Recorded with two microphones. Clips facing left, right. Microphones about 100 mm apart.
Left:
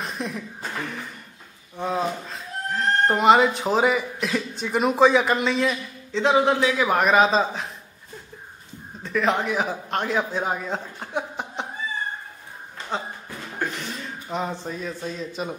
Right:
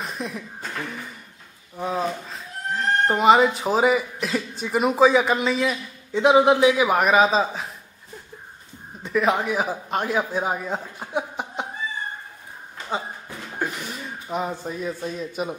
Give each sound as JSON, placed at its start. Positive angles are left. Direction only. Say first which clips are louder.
{"t": 0.0, "sound": "speech", "louder": "left 1 dB", "side_deg": 0}
{"t": 6.1, "sound": "a man's voice", "louder": "right 3 dB", "side_deg": -15}
{"t": 9.0, "sound": "a man's voice", "louder": "right 1 dB", "side_deg": -10}
{"t": 13.6, "sound": "speech", "louder": "even", "side_deg": -10}